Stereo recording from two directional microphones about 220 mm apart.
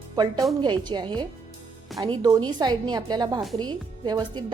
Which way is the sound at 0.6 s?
20° right (ahead or behind).